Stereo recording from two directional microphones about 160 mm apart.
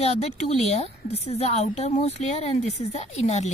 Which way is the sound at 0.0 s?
40° left (ahead or behind).